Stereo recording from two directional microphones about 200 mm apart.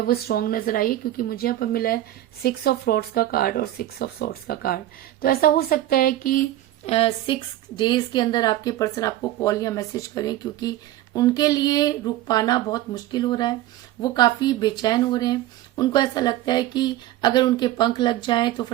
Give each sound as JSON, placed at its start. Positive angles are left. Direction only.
{"t": 0.0, "sound": "speech", "side_deg": 50}
{"t": 6.8, "sound": "a woman's voice", "side_deg": 30}